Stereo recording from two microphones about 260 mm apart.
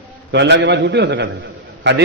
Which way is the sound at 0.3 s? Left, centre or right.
Right.